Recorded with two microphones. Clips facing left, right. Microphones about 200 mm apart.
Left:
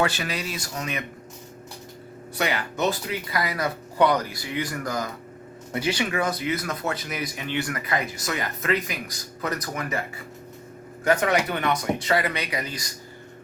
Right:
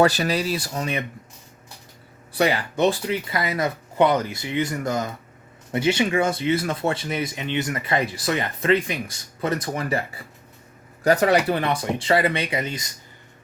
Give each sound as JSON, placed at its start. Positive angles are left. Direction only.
{"t": 0.0, "sound": "speech", "side_deg": -35}
{"t": 2.3, "sound": "speech", "side_deg": -30}
{"t": 11.0, "sound": "speech", "side_deg": -35}